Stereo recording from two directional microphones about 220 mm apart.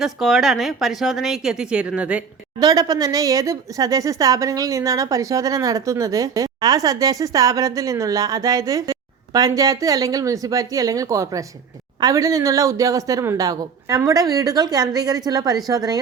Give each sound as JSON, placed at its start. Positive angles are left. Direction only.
{"t": 0.0, "sound": "a woman's voice", "side_deg": 0}
{"t": 2.6, "sound": "a woman's voice", "side_deg": -15}